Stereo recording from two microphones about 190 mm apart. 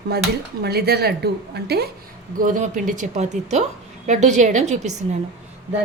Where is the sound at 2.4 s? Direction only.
45° right (ahead or behind).